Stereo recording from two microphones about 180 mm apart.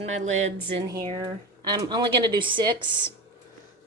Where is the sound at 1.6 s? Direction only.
20° right (ahead or behind).